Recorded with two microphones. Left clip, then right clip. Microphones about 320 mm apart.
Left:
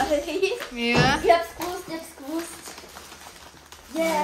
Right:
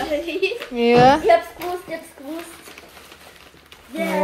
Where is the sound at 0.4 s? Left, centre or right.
Centre.